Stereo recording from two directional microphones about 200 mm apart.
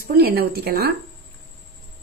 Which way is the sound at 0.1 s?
50° right (ahead or behind).